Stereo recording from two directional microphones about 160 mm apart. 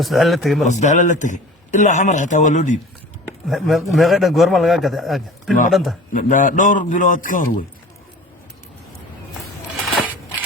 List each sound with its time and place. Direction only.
0.0 s a man's voice: centre (ahead or behind)
0.7 s a man's voice: 50° left (ahead or behind)
3.4 s a man's voice: centre (ahead or behind)
6.1 s a man's voice: 55° left (ahead or behind)